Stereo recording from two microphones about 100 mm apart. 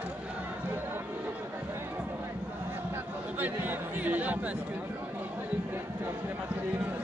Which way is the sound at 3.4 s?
15° right (ahead or behind).